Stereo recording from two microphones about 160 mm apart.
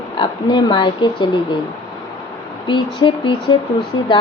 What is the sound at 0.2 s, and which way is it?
Speech, 30° left (ahead or behind).